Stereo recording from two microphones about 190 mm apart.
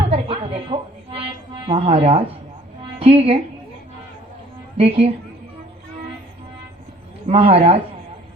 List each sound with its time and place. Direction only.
0.1 s a sound: 30° right (ahead or behind)
1.7 s speech: 30° right (ahead or behind)
4.8 s speech: 30° right (ahead or behind)
7.3 s speech: 30° right (ahead or behind)